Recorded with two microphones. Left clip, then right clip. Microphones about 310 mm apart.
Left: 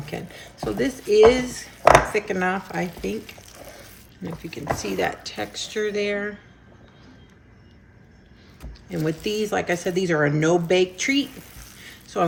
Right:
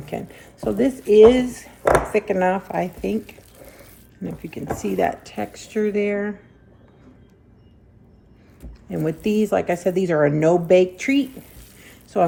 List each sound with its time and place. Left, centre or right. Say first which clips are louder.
0.0 s speech: right 3 dB; right
8.9 s speech: right 3 dB; right